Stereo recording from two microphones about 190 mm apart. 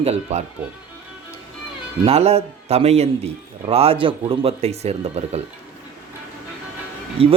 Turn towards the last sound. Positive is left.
turn(degrees=-30)  # may be behind; listen again after turning